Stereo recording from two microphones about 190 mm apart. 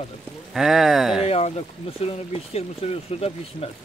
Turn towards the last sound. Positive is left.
turn(degrees=30)  # may be behind; listen again after turning